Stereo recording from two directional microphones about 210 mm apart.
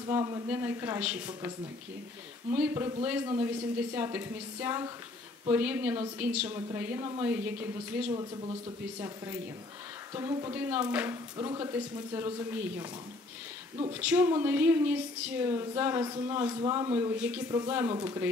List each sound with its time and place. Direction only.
0.1 s a woman's voice: 15° right (ahead or behind)
2.5 s a woman's voice: 10° right (ahead or behind)
8.1 s speech: 20° right (ahead or behind)
10.1 s a woman's voice: 15° right (ahead or behind)
13.9 s a woman's voice: 10° right (ahead or behind)
17.1 s a woman's voice: 5° right (ahead or behind)